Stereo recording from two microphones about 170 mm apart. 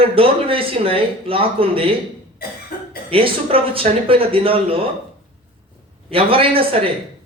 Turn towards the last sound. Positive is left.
turn(degrees=-35)  # may be behind; listen again after turning